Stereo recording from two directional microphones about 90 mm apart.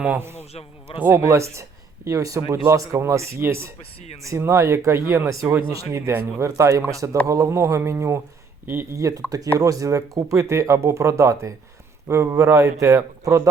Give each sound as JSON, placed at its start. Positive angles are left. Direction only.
{"t": 0.2, "sound": "a man's voice", "side_deg": -25}
{"t": 5.3, "sound": "speech", "side_deg": -35}